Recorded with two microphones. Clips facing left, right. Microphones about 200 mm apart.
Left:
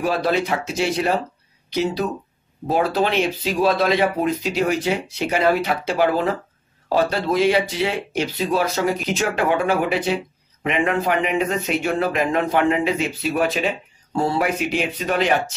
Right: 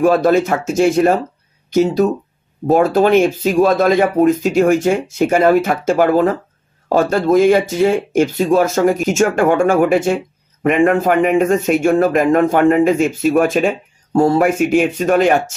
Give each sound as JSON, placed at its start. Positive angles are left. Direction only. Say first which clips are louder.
{"t": 0.0, "sound": "speech", "louder": "right 8 dB", "side_deg": -45}